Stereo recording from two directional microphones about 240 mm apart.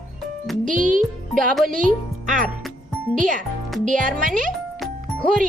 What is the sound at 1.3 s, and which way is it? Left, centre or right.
Speech, centre.